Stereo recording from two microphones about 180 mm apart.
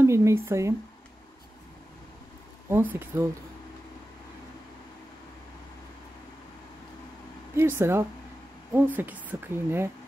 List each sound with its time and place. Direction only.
0.0 s speech: 15° right (ahead or behind)
2.7 s a woman's voice: 10° right (ahead or behind)
7.5 s a woman's voice: 15° right (ahead or behind)